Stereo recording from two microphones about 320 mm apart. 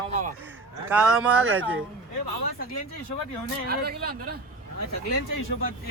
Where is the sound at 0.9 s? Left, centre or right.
Centre.